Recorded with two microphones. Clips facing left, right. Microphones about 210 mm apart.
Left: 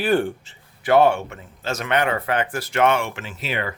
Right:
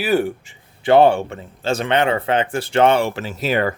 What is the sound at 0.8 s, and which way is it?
Speech, 30° right (ahead or behind).